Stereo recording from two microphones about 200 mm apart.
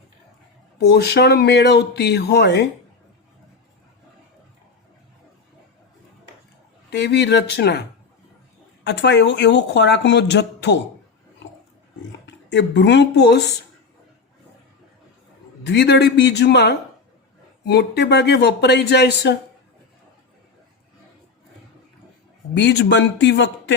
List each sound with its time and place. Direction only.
0.8 s speech: 55° left (ahead or behind)
6.9 s speech: 60° left (ahead or behind)
12.2 s speech: 60° left (ahead or behind)
15.6 s speech: 60° left (ahead or behind)
22.5 s speech: 60° left (ahead or behind)